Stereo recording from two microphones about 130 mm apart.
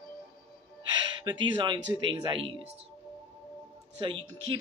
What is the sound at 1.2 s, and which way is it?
Speech, 35° right (ahead or behind).